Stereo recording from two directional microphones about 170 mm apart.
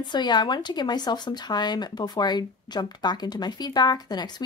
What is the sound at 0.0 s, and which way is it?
Speech, 25° left (ahead or behind).